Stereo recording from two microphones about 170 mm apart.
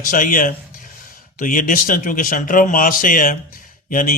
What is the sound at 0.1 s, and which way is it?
Speech, 50° left (ahead or behind).